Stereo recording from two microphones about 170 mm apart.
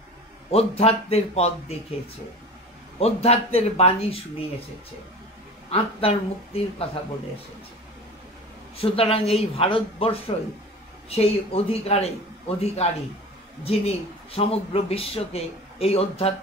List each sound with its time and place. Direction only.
0.5 s speech: 35° left (ahead or behind)
3.0 s speech: 35° left (ahead or behind)
5.7 s speech: 35° left (ahead or behind)
8.7 s speech: 35° left (ahead or behind)